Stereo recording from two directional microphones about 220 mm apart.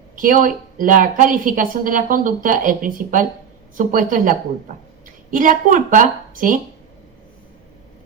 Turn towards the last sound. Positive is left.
turn(degrees=-40)  # may be behind; listen again after turning